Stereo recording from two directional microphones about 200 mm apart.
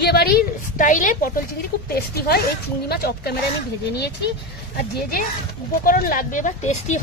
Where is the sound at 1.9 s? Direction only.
50° left (ahead or behind).